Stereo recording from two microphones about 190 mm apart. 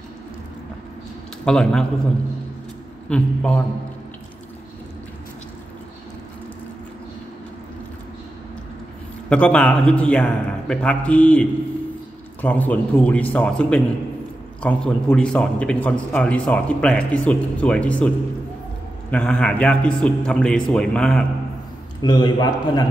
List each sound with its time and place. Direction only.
1.4 s a man's voice: 5° left (ahead or behind)
3.1 s a man's voice: 5° left (ahead or behind)
9.3 s a man's voice: 5° left (ahead or behind)
22.0 s a man's voice: 20° left (ahead or behind)